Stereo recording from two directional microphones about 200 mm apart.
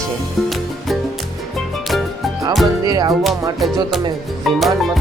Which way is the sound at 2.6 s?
20° right (ahead or behind).